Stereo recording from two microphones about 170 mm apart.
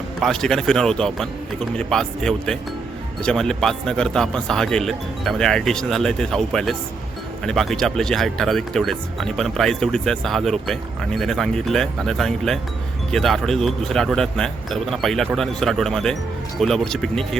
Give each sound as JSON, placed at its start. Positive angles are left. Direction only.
{"t": 0.2, "sound": "speech", "side_deg": 5}